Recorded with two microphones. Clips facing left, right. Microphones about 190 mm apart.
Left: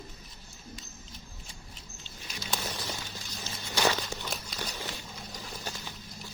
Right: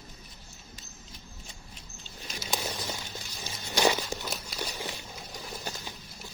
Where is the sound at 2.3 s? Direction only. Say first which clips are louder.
Right 2 dB; 10° right (ahead or behind).